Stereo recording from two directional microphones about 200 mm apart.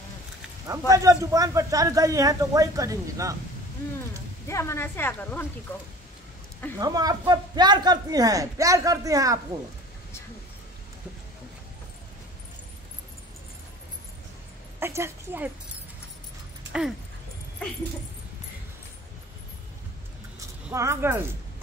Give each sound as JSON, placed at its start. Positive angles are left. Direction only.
{"t": 0.7, "sound": "speech", "side_deg": -15}
{"t": 4.5, "sound": "speech", "side_deg": 15}
{"t": 6.8, "sound": "speech", "side_deg": -20}
{"t": 14.8, "sound": "a woman's voice", "side_deg": -15}
{"t": 20.7, "sound": "speech", "side_deg": -15}